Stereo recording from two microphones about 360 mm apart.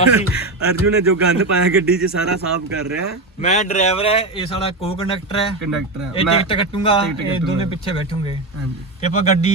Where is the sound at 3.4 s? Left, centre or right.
Centre.